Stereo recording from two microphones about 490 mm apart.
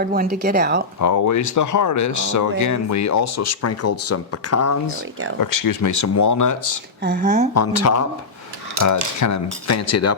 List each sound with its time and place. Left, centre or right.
0.0 s a woman's voice: centre
0.9 s speech: left
5.4 s speech: left
7.0 s speech: centre
7.5 s speech: left
9.2 s speech: left